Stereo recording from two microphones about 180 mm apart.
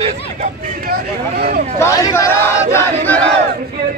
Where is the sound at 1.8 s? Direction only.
15° left (ahead or behind).